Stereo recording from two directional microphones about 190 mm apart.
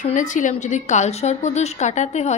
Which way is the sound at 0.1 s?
40° left (ahead or behind).